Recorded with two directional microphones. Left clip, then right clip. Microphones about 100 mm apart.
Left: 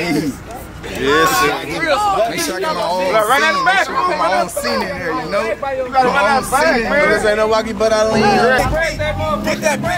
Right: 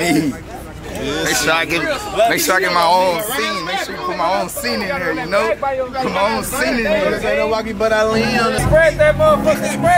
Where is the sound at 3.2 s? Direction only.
35° left (ahead or behind).